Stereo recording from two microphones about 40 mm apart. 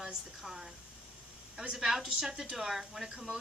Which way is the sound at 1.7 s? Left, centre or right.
Centre.